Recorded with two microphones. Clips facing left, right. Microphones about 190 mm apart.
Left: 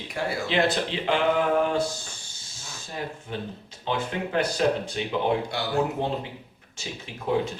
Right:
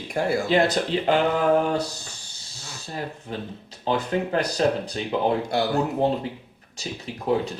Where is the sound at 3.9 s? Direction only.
35° right (ahead or behind).